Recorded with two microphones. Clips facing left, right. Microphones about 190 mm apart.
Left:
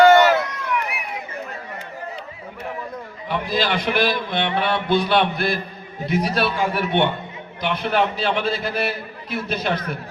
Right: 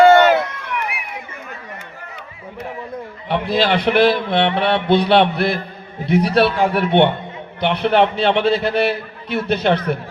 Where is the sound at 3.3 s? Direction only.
60° right (ahead or behind).